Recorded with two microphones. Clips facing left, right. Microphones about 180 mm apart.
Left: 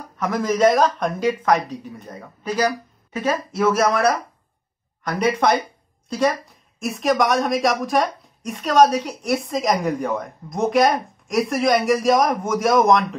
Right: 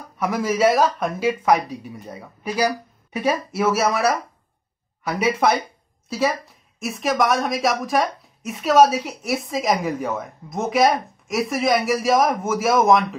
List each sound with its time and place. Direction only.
0.2 s speech: 10° right (ahead or behind)